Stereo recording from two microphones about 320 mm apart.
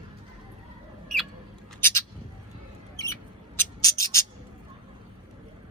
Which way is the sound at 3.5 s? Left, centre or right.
Centre.